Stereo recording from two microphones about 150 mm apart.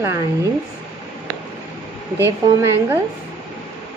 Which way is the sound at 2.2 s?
15° right (ahead or behind).